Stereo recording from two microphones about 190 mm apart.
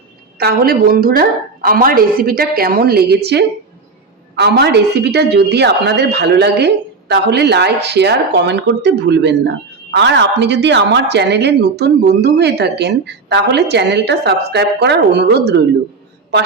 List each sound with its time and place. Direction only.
0.3 s a woman's voice: 55° right (ahead or behind)